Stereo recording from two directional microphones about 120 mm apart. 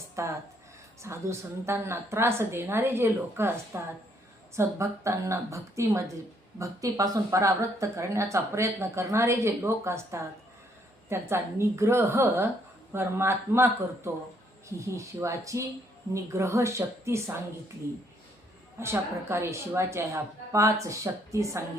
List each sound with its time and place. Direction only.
0.2 s speech: 25° right (ahead or behind)
18.8 s speech: 20° right (ahead or behind)